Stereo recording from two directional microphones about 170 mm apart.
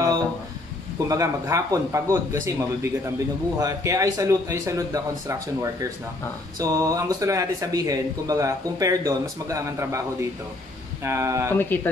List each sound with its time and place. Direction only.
0.9 s speech: 20° right (ahead or behind)
11.1 s speech: 15° right (ahead or behind)
11.5 s speech: 10° left (ahead or behind)